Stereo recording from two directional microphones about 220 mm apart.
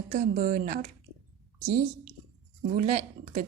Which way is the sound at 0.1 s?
40° right (ahead or behind).